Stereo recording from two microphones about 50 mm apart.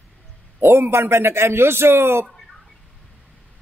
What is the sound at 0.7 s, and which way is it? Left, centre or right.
A man's voice, right.